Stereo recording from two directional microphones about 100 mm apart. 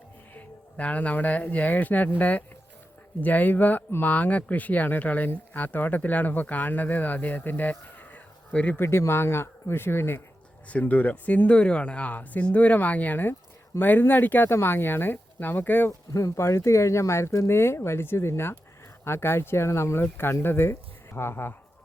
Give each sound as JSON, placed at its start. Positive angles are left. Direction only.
{"t": 0.3, "sound": "speech", "side_deg": 15}
{"t": 15.9, "sound": "speech", "side_deg": 35}